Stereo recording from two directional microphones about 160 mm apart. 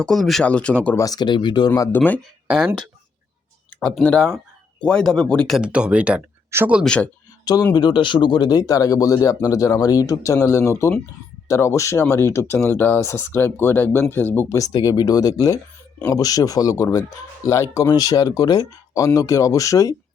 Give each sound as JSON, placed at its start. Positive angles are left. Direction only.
{"t": 0.0, "sound": "speech", "side_deg": 0}
{"t": 0.9, "sound": "speech", "side_deg": 25}
{"t": 3.8, "sound": "speech", "side_deg": 5}
{"t": 6.8, "sound": "speech", "side_deg": 5}
{"t": 7.4, "sound": "speech", "side_deg": 25}